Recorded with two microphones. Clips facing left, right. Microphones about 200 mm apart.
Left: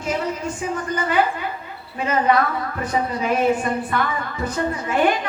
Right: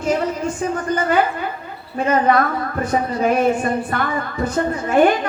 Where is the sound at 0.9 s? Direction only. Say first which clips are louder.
Right 2 dB; 50° right (ahead or behind).